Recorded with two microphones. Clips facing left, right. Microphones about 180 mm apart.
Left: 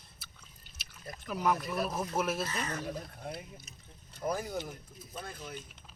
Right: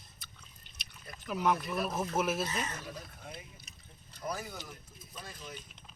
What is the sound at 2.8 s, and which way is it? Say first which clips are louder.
Speech: left 6 dB; 50° left (ahead or behind).